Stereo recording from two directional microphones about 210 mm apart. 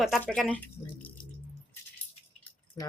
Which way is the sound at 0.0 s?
Centre (ahead or behind).